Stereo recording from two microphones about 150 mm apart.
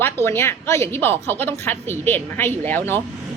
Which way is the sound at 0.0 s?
15° left (ahead or behind).